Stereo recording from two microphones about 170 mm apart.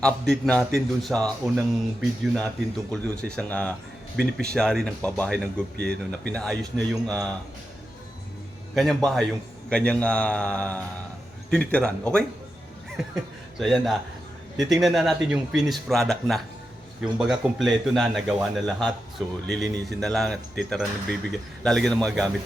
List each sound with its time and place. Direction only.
0.0 s a man's voice: 5° left (ahead or behind)
5.7 s speech: 75° right (ahead or behind)
6.2 s a man's voice: 5° left (ahead or behind)
8.7 s a man's voice: centre (ahead or behind)